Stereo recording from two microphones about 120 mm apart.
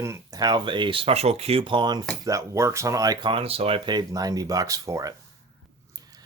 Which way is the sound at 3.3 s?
50° right (ahead or behind).